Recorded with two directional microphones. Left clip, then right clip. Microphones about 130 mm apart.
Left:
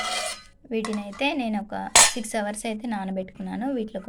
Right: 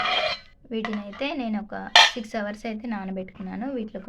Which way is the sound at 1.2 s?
20° left (ahead or behind).